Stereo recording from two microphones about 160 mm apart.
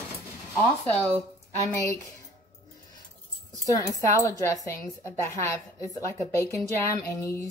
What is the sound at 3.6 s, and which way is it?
A woman's voice, 20° left (ahead or behind).